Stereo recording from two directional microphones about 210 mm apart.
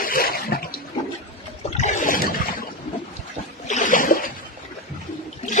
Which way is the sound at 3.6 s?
35° left (ahead or behind).